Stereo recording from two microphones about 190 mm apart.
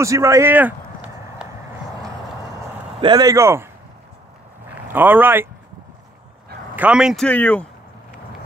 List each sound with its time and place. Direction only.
0.0 s a sound: 15° right (ahead or behind)
3.0 s speech: 20° right (ahead or behind)
4.9 s speech: 10° right (ahead or behind)
6.7 s speech: 5° right (ahead or behind)
7.2 s speech: 10° left (ahead or behind)